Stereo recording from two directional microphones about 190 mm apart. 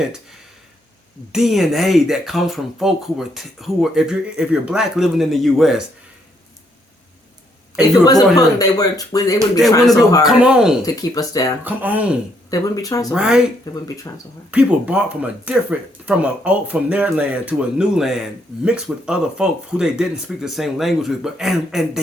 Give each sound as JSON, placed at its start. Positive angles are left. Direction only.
{"t": 1.3, "sound": "speech", "side_deg": 0}
{"t": 7.8, "sound": "speech", "side_deg": 20}
{"t": 10.2, "sound": "speech", "side_deg": -5}
{"t": 10.8, "sound": "speech", "side_deg": 20}
{"t": 11.6, "sound": "speech", "side_deg": -10}
{"t": 12.5, "sound": "speech", "side_deg": 20}
{"t": 13.1, "sound": "speech", "side_deg": -5}
{"t": 13.8, "sound": "speech", "side_deg": 15}
{"t": 14.5, "sound": "speech", "side_deg": -5}